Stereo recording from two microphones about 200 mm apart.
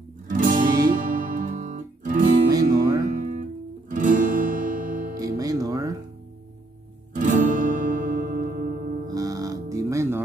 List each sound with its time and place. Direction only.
0.3 s music: 40° right (ahead or behind)
2.5 s music: 20° right (ahead or behind)
3.1 s music: 40° right (ahead or behind)
5.4 s music: 20° right (ahead or behind)
7.2 s music: 40° right (ahead or behind)
9.0 s music: 15° right (ahead or behind)